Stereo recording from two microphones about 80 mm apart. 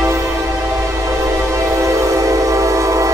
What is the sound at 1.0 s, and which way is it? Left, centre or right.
Train, right.